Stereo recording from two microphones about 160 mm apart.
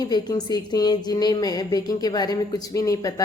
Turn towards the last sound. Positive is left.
turn(degrees=20)  # may be behind; listen again after turning